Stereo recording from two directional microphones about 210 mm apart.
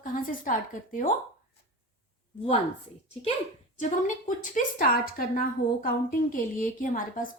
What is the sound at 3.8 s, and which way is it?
A woman's voice, 40° left (ahead or behind).